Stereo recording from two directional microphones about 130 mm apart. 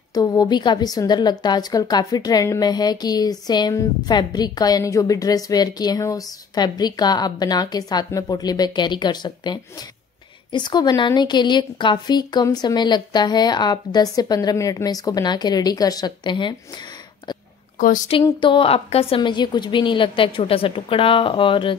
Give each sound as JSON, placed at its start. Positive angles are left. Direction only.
{"t": 0.1, "sound": "a woman's voice", "side_deg": 30}
{"t": 17.7, "sound": "a woman's voice", "side_deg": 85}
{"t": 18.4, "sound": "a woman's voice", "side_deg": 40}